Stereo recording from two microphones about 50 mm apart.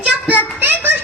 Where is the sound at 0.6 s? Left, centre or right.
Right.